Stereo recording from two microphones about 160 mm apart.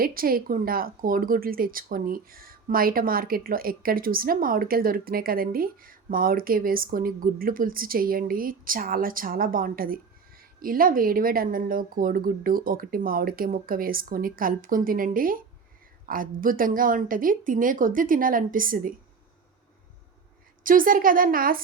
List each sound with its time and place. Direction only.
0.0 s speech: 65° right (ahead or behind)
20.7 s speech: 60° right (ahead or behind)